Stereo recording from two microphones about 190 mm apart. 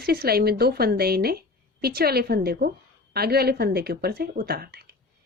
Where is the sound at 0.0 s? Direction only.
55° right (ahead or behind).